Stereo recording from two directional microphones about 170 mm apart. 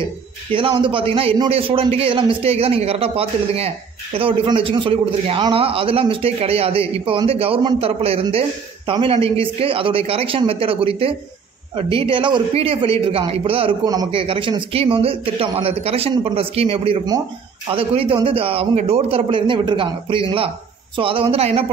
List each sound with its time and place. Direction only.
0.6 s a man's voice: 30° right (ahead or behind)